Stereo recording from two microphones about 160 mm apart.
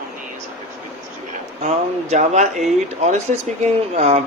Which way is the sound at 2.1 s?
45° right (ahead or behind).